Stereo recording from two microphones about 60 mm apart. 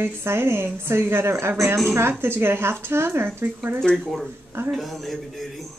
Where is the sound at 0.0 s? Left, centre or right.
Right.